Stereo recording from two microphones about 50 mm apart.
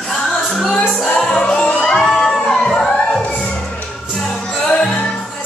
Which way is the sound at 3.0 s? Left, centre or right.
Left.